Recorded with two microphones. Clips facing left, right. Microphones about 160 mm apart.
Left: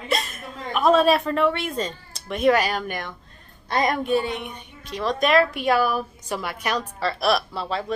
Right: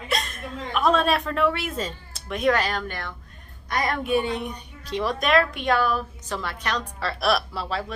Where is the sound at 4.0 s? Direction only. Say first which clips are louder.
Left 1 dB; 10° right (ahead or behind).